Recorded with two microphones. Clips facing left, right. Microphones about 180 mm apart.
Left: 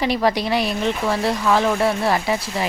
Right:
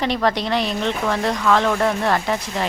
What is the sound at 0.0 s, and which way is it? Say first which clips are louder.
Speech: left 1 dB; 10° left (ahead or behind).